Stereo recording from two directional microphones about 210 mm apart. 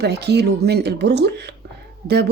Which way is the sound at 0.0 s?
50° right (ahead or behind).